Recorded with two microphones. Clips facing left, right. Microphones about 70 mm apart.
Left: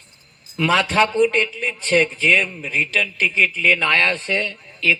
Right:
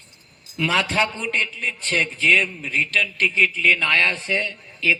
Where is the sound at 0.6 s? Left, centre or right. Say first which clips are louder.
Left 4 dB; centre.